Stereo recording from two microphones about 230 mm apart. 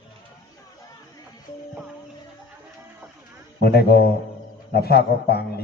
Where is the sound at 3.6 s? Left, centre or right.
Left.